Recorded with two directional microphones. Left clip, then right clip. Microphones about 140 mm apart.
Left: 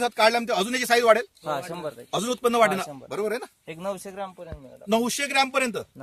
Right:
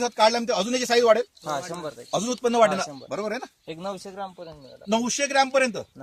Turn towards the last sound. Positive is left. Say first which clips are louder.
# right 2 dB
turn(degrees=-30)  # may be behind; listen again after turning